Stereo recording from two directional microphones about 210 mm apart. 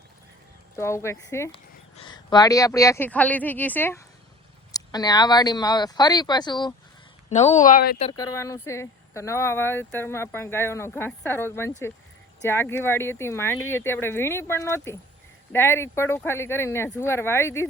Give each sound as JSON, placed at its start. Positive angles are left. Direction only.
{"t": 0.8, "sound": "speech", "side_deg": 15}
{"t": 7.3, "sound": "speech", "side_deg": 35}
{"t": 8.1, "sound": "speech", "side_deg": 15}